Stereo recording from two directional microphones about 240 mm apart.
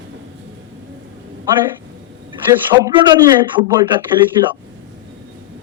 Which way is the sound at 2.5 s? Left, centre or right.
Centre.